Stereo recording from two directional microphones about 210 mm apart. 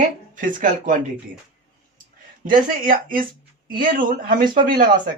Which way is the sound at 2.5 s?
40° right (ahead or behind).